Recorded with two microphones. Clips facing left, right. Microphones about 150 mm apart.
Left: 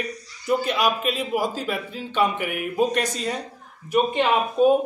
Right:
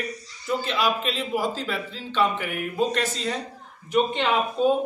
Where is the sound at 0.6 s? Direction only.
15° left (ahead or behind).